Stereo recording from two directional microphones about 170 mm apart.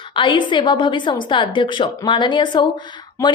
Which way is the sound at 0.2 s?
30° left (ahead or behind).